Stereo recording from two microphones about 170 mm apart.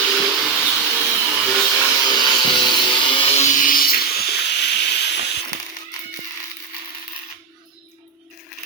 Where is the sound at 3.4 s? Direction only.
50° left (ahead or behind).